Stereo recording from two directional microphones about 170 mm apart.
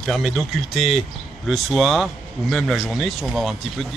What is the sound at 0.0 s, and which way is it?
Speech, centre (ahead or behind).